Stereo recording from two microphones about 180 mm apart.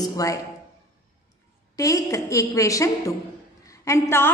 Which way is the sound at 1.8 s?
20° left (ahead or behind).